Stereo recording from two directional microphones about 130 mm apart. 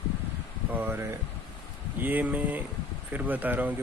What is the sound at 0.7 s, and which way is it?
Speech, 15° right (ahead or behind).